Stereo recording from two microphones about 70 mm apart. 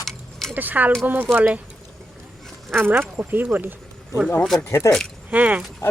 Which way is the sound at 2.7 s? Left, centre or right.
Right.